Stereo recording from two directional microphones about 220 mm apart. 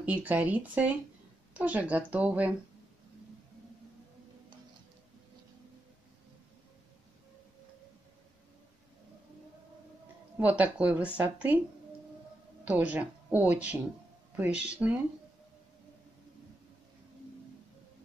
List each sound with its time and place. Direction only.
0.0 s speech: 5° right (ahead or behind)
10.4 s speech: 5° right (ahead or behind)
12.6 s speech: 5° right (ahead or behind)